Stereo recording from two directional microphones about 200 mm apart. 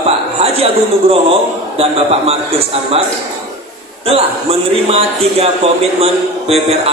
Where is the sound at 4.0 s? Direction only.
30° right (ahead or behind).